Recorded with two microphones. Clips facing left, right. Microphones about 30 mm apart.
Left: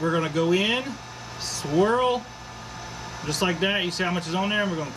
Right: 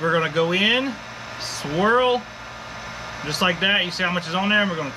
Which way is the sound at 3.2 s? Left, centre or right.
Right.